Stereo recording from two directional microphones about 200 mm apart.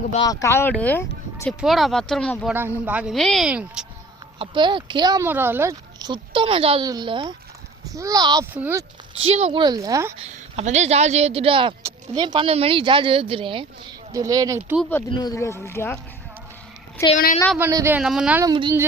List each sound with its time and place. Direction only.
0.4 s speech: 10° left (ahead or behind)
2.5 s speech: 10° right (ahead or behind)
4.4 s speech: 25° right (ahead or behind)
9.2 s speech: 30° right (ahead or behind)
10.2 s speech: 30° right (ahead or behind); by 14.8 s 15° right (ahead or behind)
15.1 s speech: 20° left (ahead or behind)
17.0 s speech: 15° left (ahead or behind)
17.7 s speech: 15° right (ahead or behind)
18.4 s speech: 25° right (ahead or behind)